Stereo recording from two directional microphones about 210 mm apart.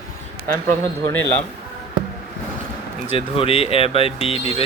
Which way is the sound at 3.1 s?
25° left (ahead or behind).